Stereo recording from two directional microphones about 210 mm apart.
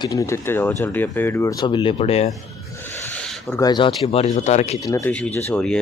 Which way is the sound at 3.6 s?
20° left (ahead or behind).